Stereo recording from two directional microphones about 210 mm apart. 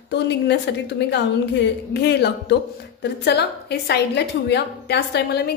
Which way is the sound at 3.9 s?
55° left (ahead or behind).